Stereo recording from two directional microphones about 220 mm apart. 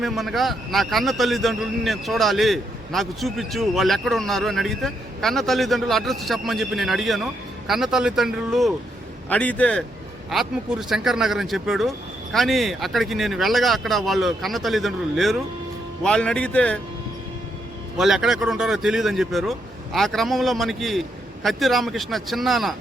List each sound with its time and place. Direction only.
0.0 s a man's voice: centre (ahead or behind)
17.9 s a man's voice: centre (ahead or behind)